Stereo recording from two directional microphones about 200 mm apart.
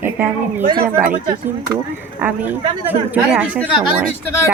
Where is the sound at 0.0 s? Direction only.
10° right (ahead or behind).